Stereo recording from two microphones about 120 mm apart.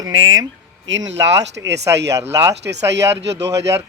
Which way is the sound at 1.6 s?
25° right (ahead or behind).